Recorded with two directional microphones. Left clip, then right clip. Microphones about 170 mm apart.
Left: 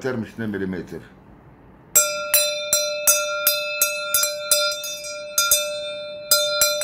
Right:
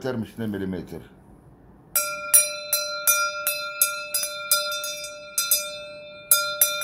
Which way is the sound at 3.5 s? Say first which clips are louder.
Left 5 dB; 20° left (ahead or behind).